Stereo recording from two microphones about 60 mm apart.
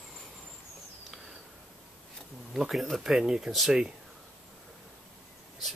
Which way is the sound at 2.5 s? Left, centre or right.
Centre.